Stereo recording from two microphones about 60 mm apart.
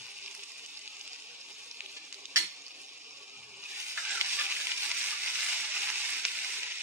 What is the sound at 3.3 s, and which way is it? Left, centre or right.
Water, right.